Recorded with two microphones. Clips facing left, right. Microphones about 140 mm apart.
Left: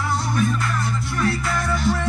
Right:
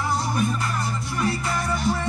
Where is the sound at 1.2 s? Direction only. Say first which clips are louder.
Left 2 dB; centre (ahead or behind).